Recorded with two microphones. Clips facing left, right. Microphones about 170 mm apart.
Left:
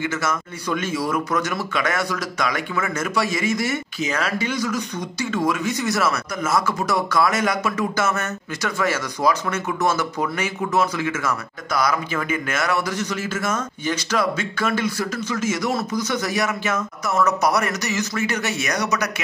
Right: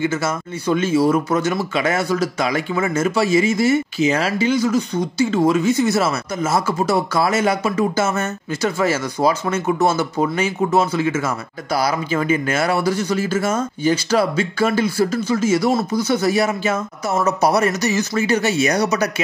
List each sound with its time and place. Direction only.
0.0 s speech: 30° right (ahead or behind)